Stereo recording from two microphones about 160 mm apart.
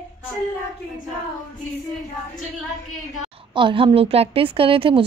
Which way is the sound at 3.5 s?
35° right (ahead or behind).